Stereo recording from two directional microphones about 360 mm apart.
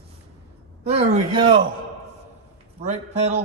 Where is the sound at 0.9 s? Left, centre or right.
Centre.